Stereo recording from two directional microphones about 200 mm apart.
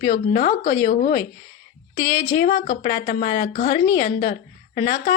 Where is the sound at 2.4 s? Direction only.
45° left (ahead or behind).